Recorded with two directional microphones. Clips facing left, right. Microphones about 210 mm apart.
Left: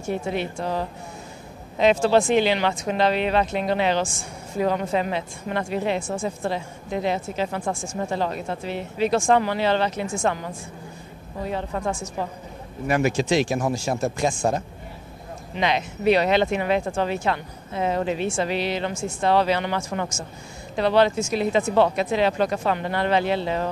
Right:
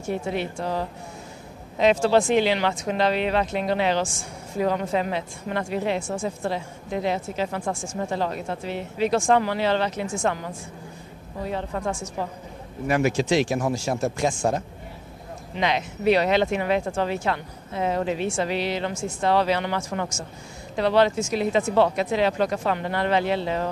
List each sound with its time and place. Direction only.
0.4 s speech: 20° left (ahead or behind)
11.7 s speech: 20° left (ahead or behind)
13.0 s speech: 65° right (ahead or behind); by 14.6 s 80° right
15.6 s speech: 25° left (ahead or behind)